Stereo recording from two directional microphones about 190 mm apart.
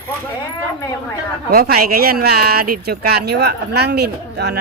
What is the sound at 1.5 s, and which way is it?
Speech, 50° right (ahead or behind).